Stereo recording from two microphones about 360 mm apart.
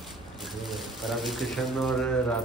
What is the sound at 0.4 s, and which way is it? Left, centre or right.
Speech, centre.